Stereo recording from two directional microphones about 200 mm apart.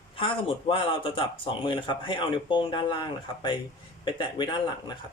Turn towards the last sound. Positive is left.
turn(degrees=20)  # may be behind; listen again after turning